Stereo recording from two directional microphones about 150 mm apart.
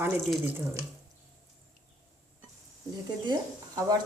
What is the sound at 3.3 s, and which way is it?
Speech, 25° right (ahead or behind).